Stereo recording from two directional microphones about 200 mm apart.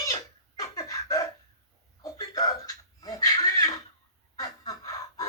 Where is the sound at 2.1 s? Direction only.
20° left (ahead or behind).